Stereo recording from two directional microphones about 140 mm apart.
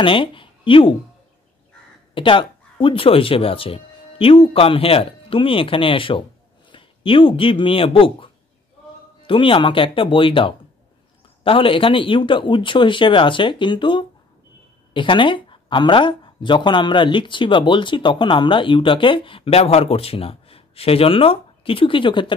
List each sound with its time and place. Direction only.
0.0 s speech: 40° left (ahead or behind)
2.1 s speech: 35° left (ahead or behind)